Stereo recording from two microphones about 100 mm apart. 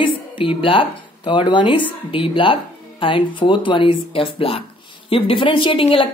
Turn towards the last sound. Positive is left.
turn(degrees=60)  # may be behind; listen again after turning